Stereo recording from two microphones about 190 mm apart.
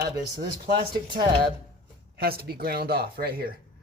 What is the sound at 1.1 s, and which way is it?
Speech, 25° right (ahead or behind).